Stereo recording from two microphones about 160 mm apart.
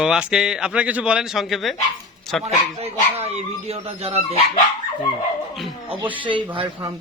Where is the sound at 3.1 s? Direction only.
40° right (ahead or behind).